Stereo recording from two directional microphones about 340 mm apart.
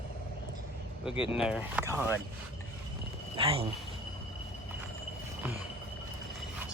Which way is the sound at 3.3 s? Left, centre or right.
Centre.